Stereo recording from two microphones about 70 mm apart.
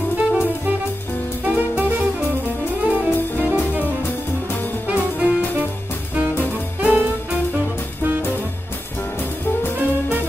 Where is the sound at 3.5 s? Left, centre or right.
Right.